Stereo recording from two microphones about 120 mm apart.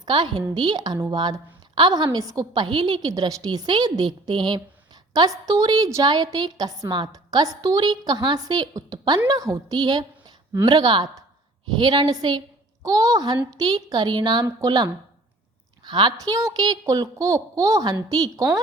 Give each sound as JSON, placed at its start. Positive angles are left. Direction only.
{"t": 0.0, "sound": "a woman's voice", "side_deg": -40}